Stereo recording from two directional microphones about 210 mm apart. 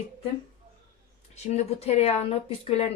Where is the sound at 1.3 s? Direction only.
30° left (ahead or behind).